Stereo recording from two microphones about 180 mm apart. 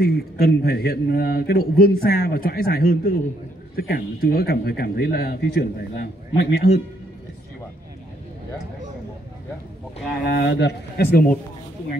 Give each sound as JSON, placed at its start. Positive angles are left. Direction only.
{"t": 0.0, "sound": "a man's voice", "side_deg": 60}
{"t": 10.2, "sound": "a man's voice", "side_deg": 75}